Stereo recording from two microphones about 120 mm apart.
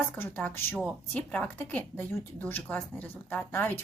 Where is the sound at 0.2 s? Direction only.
15° left (ahead or behind).